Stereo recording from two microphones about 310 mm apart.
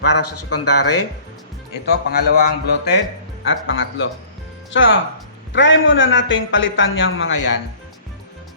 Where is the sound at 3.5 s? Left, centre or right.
Left.